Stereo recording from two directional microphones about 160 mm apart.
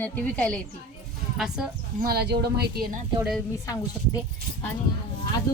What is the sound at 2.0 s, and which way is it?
Speech, 75° right (ahead or behind).